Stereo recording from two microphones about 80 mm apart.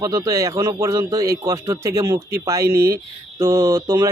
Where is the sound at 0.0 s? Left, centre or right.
Right.